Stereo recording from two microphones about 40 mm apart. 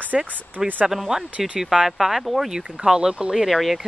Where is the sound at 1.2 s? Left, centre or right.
Right.